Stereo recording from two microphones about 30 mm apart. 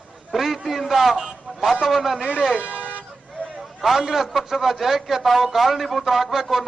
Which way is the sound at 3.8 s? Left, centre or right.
Centre.